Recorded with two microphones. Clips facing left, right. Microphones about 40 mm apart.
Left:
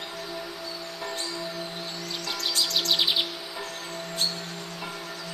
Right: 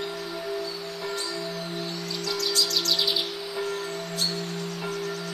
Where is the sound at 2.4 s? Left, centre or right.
Left.